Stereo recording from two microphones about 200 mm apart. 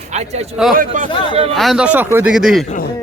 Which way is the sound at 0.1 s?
35° right (ahead or behind).